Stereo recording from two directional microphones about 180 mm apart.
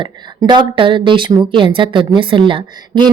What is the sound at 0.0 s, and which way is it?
Speech, 25° right (ahead or behind).